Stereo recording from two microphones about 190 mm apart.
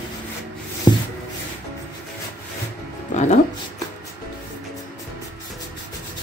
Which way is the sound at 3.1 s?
40° left (ahead or behind).